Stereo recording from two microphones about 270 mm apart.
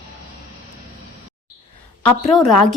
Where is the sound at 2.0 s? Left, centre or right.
Centre.